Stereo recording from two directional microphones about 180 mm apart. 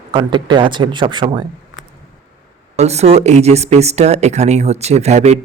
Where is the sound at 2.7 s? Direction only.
35° right (ahead or behind).